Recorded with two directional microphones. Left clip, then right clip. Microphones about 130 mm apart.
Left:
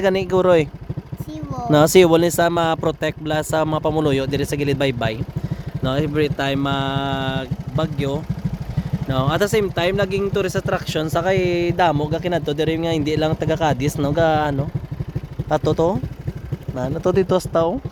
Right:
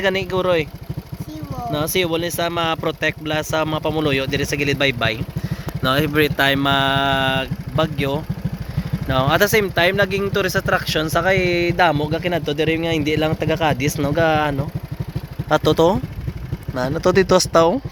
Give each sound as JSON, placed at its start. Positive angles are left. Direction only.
{"t": 0.0, "sound": "speech", "side_deg": 45}
{"t": 2.2, "sound": "speech", "side_deg": 80}
{"t": 5.8, "sound": "speech", "side_deg": 15}
{"t": 15.4, "sound": "speech", "side_deg": 10}